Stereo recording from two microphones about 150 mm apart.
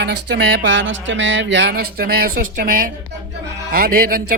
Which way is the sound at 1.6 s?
90° right.